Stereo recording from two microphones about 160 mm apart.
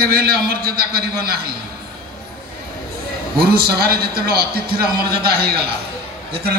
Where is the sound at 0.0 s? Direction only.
70° right (ahead or behind).